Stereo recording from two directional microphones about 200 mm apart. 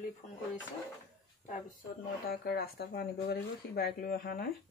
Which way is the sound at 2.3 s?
50° left (ahead or behind).